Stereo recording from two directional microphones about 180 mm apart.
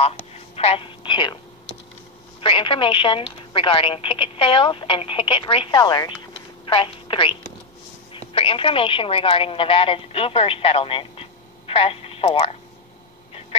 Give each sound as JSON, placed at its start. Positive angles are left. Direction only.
{"t": 0.3, "sound": "telephone", "side_deg": 35}
{"t": 2.4, "sound": "a woman's voice", "side_deg": 30}
{"t": 13.5, "sound": "a sound", "side_deg": 35}